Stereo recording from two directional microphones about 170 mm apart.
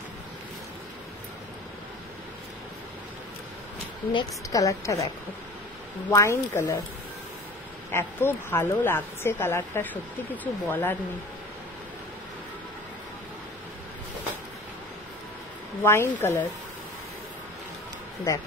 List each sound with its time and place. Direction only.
4.1 s a woman's voice: 20° left (ahead or behind)
7.9 s a woman's voice: 15° left (ahead or behind)
15.8 s a woman's voice: 15° left (ahead or behind)